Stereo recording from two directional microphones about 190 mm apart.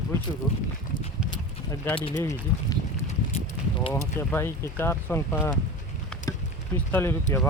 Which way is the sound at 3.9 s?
10° left (ahead or behind).